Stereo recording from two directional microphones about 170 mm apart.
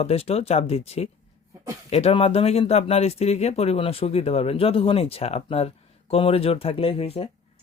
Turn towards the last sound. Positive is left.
turn(degrees=35)  # may be behind; listen again after turning